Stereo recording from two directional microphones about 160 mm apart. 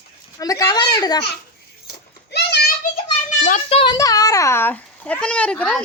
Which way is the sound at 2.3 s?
90° left.